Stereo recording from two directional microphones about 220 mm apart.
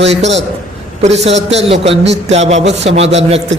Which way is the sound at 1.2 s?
30° right (ahead or behind).